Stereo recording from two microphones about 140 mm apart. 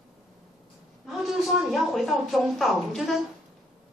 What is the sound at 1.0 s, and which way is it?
A woman's voice, centre (ahead or behind).